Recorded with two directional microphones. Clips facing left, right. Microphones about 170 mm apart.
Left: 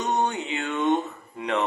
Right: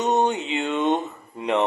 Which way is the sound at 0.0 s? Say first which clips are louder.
Right 4 dB; 20° right (ahead or behind).